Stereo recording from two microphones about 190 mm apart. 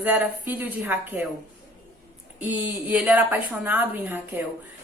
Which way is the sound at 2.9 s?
10° right (ahead or behind).